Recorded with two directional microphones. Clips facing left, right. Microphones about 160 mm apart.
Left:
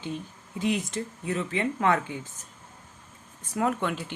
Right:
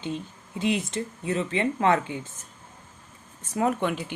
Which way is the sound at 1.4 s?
30° right (ahead or behind).